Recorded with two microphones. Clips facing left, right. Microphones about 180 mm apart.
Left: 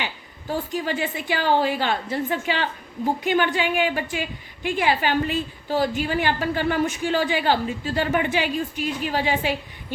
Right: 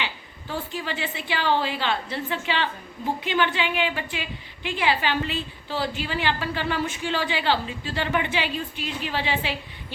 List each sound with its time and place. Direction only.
0.0 s a woman's voice: 45° left (ahead or behind)